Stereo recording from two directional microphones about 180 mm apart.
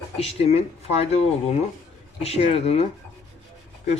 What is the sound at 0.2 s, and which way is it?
Speech, 35° left (ahead or behind).